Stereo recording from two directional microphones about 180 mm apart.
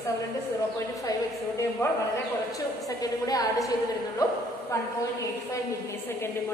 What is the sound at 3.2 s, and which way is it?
Speech, 20° left (ahead or behind).